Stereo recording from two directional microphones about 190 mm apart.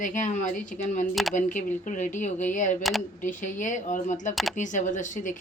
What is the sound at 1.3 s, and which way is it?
Speech, 40° left (ahead or behind).